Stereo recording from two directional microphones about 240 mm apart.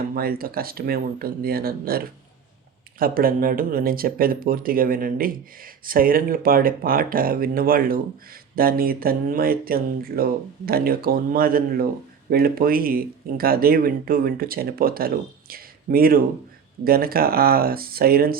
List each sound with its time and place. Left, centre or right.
0.1 s speech: right